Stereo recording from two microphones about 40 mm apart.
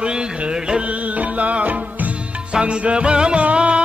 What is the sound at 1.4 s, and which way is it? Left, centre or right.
Music, right.